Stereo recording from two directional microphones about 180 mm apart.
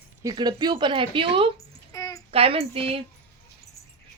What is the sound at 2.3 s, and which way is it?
Speech, 35° right (ahead or behind).